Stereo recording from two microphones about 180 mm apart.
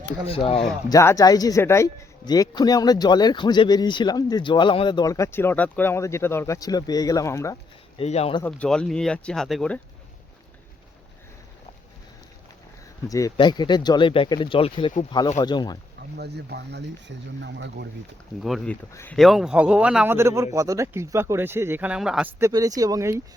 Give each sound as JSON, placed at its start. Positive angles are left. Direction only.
{"t": 0.3, "sound": "speech", "side_deg": 30}
{"t": 0.9, "sound": "speech", "side_deg": 20}
{"t": 7.9, "sound": "speech", "side_deg": 35}
{"t": 8.4, "sound": "speech", "side_deg": 5}
{"t": 13.1, "sound": "speech", "side_deg": 20}
{"t": 16.1, "sound": "speech", "side_deg": -65}
{"t": 18.4, "sound": "speech", "side_deg": 0}
{"t": 19.2, "sound": "speech", "side_deg": 0}